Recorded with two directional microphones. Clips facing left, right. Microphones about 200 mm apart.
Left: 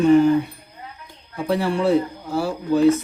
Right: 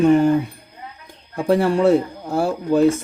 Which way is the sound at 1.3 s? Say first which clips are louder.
Right 4 dB; 45° right (ahead or behind).